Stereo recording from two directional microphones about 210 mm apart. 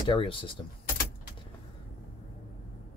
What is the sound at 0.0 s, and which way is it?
Speech, 25° left (ahead or behind).